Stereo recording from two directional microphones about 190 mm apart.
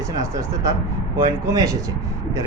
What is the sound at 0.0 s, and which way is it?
Speech, 15° right (ahead or behind).